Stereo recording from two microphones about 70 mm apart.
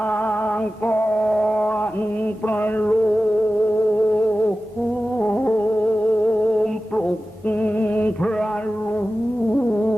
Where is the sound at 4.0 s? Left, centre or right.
Left.